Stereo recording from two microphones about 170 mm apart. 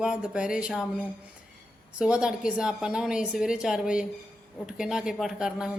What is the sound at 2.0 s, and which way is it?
A woman's voice, 5° right (ahead or behind).